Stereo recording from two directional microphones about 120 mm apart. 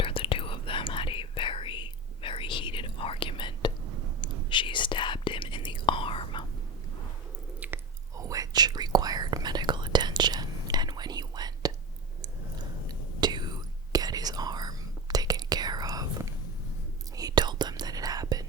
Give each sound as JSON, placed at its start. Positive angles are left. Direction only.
{"t": 0.0, "sound": "whispering", "side_deg": 50}
{"t": 7.6, "sound": "chewing", "side_deg": -10}
{"t": 8.1, "sound": "whispering", "side_deg": -30}
{"t": 12.9, "sound": "whispering", "side_deg": -35}